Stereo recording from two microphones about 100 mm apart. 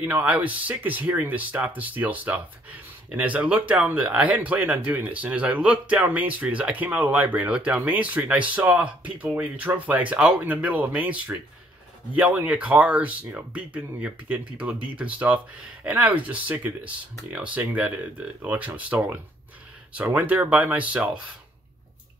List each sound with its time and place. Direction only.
0.0 s speech: 15° right (ahead or behind)